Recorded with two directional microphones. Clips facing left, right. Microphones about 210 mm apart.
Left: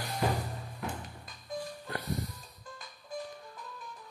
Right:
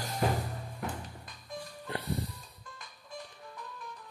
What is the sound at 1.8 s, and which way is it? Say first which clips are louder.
Music: right 3 dB; 30° right (ahead or behind).